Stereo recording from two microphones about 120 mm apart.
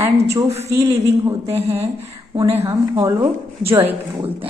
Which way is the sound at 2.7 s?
35° right (ahead or behind).